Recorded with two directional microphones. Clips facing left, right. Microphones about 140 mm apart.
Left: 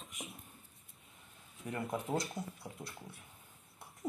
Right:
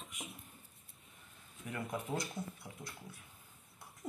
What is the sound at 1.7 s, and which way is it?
Speech, 30° left (ahead or behind).